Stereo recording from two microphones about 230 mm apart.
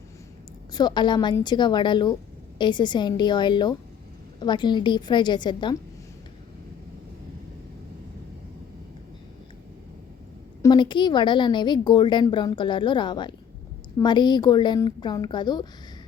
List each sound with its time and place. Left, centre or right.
0.7 s a woman's voice: centre
10.6 s a woman's voice: centre